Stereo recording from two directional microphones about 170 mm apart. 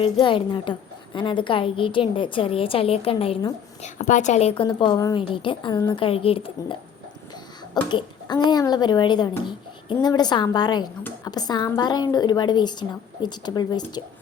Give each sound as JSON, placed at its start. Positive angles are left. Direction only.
{"t": 0.0, "sound": "a woman's voice", "side_deg": 30}
{"t": 3.8, "sound": "a woman's voice", "side_deg": 45}